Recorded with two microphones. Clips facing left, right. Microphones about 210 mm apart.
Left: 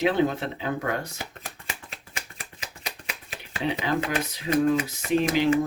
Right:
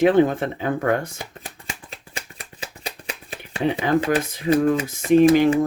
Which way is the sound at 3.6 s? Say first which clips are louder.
Right 6 dB; 50° right (ahead or behind).